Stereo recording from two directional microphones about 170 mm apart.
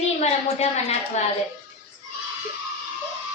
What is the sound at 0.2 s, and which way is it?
A woman's voice, 40° left (ahead or behind).